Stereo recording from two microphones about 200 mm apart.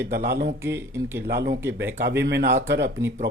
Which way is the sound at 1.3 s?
55° right (ahead or behind).